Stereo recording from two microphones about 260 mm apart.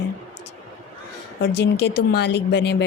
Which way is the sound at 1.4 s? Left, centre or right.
Left.